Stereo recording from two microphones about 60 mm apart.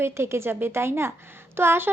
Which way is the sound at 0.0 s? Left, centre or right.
Right.